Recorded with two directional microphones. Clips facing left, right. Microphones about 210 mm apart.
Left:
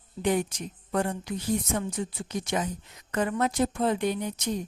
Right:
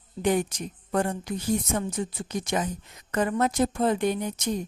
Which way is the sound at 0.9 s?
45° right (ahead or behind).